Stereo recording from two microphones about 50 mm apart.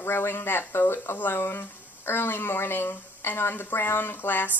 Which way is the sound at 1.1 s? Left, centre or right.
Left.